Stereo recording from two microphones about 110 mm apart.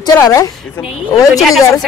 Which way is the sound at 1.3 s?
Centre (ahead or behind).